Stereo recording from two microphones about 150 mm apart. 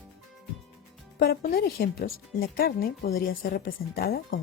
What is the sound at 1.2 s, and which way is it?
Speech, 85° left.